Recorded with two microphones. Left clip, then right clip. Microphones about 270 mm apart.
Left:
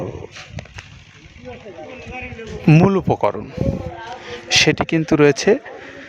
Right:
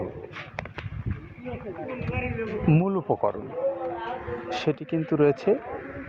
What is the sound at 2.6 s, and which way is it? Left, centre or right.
Speech, left.